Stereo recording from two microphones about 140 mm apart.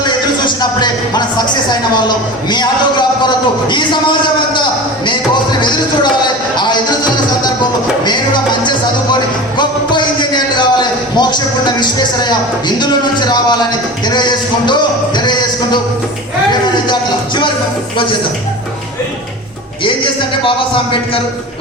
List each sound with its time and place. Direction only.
0.0 s speech: 30° left (ahead or behind)
5.0 s speech: 35° left (ahead or behind)
9.6 s a sound: 35° left (ahead or behind)
14.1 s speech: 30° left (ahead or behind)
20.4 s speech: 35° left (ahead or behind)